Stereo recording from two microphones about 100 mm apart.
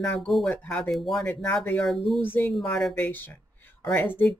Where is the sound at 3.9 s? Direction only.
20° left (ahead or behind).